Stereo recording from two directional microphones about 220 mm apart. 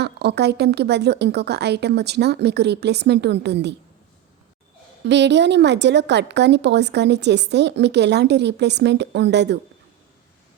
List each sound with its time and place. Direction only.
0.0 s a woman's voice: 50° right (ahead or behind)
5.0 s a woman's voice: 50° right (ahead or behind)